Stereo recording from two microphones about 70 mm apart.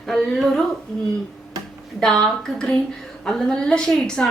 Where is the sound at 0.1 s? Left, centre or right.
Centre.